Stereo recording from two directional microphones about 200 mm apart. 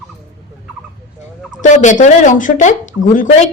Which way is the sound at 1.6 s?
40° left (ahead or behind).